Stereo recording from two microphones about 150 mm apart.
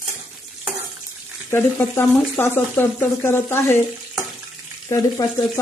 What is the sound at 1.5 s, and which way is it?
Speech, 15° left (ahead or behind).